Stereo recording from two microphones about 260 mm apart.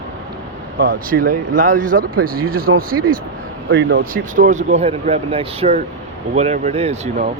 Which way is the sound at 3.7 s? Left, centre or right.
Right.